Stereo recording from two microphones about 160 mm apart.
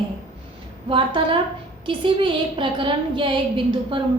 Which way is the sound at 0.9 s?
30° right (ahead or behind).